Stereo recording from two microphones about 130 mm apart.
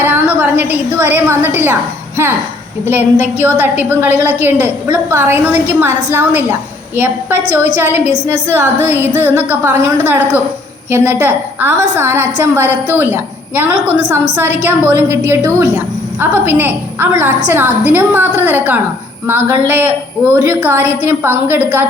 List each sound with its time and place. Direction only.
0.0 s a woman's voice: 15° right (ahead or behind)
2.8 s a woman's voice: 15° right (ahead or behind)